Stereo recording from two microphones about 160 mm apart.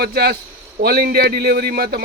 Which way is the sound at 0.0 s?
80° right.